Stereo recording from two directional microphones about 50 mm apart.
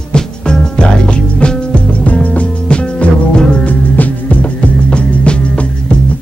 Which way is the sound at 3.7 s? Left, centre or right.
Left.